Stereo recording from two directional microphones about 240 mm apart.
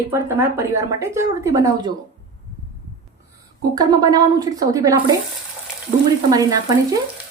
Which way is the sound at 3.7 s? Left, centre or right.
Centre.